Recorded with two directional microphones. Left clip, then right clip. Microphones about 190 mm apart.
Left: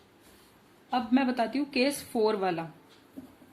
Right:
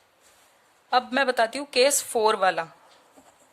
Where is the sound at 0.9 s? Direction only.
50° right (ahead or behind).